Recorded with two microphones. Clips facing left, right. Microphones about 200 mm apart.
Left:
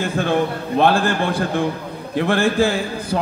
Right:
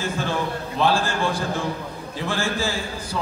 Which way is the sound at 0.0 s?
60° left (ahead or behind).